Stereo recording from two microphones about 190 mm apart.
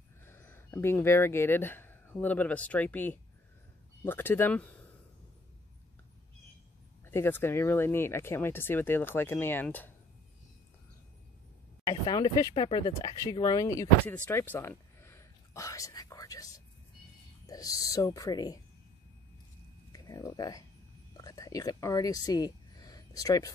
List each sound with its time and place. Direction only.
0.2 s speech: 10° left (ahead or behind)
7.1 s speech: 10° left (ahead or behind)
11.8 s speech: 20° left (ahead or behind)
19.9 s speech: 20° left (ahead or behind)
21.2 s a sound: 20° left (ahead or behind)